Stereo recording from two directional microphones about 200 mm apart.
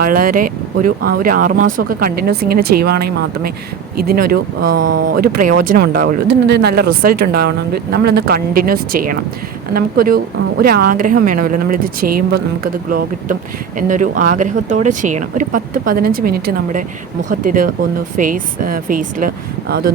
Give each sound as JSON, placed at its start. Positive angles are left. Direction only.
{"t": 0.0, "sound": "speech", "side_deg": -45}